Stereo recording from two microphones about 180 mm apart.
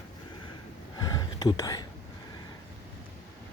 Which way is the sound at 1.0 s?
20° left (ahead or behind).